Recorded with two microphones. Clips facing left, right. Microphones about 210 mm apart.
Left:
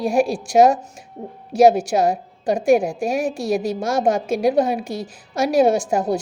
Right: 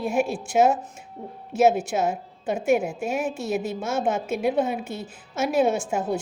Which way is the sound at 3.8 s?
90° left.